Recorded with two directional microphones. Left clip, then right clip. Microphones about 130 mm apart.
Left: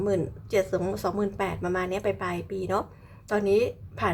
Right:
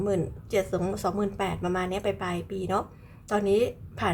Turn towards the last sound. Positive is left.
turn(degrees=10)  # may be behind; listen again after turning